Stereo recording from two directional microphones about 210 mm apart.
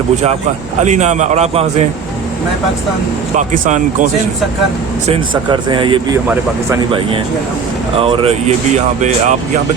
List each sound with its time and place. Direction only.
0.8 s speech: 35° right (ahead or behind)
3.3 s speech: 35° right (ahead or behind)
5.0 s speech: 20° right (ahead or behind)
7.9 s speech: 25° right (ahead or behind)